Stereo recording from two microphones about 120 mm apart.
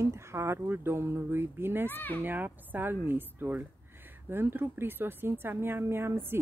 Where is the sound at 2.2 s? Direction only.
15° right (ahead or behind).